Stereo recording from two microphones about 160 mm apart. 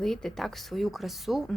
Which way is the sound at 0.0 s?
5° left (ahead or behind).